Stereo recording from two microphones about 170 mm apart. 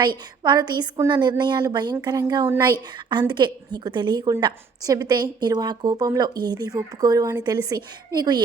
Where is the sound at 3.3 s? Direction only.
25° right (ahead or behind).